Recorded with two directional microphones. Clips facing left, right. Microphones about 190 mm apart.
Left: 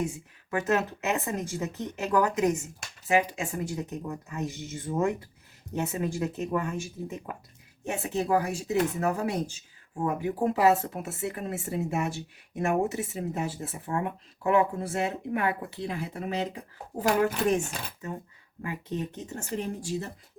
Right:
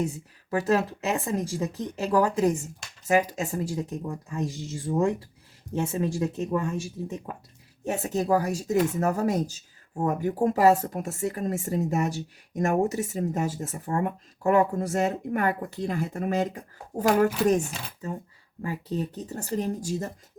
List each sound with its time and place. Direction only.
0.5 s speech: 35° right (ahead or behind)
5.7 s speech: 30° right (ahead or behind)
7.9 s speech: 40° right (ahead or behind)